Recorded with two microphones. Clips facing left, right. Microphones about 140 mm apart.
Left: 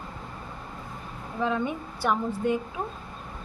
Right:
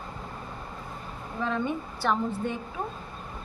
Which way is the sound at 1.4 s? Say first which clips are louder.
Left 2 dB; 10° left (ahead or behind).